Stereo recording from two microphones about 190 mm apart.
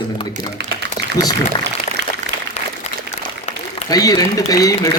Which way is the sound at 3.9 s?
20° left (ahead or behind).